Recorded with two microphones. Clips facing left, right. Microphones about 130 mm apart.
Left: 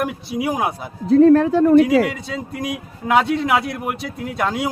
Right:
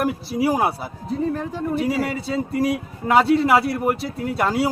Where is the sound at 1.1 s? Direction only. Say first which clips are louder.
Left 13 dB; 80° left.